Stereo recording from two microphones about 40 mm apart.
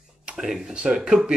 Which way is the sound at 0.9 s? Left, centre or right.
Centre.